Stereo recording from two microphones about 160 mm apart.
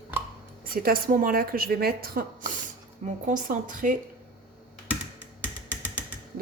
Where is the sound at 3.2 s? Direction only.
55° right (ahead or behind).